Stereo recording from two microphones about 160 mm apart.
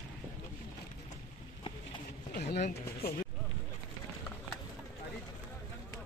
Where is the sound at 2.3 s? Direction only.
90° left.